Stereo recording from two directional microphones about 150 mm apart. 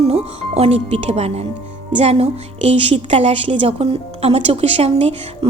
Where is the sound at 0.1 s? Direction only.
45° right (ahead or behind).